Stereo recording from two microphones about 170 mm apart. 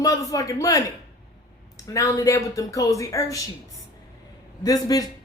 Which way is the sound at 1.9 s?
20° left (ahead or behind).